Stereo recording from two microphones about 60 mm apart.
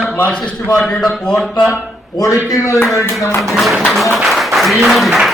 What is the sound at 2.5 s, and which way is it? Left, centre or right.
Speech, left.